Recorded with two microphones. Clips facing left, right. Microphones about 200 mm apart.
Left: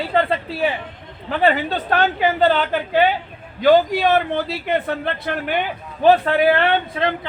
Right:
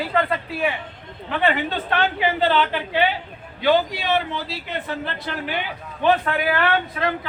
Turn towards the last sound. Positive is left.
turn(degrees=25)  # may be behind; listen again after turning